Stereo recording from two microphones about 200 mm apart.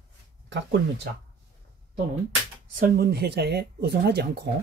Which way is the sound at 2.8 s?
50° right (ahead or behind).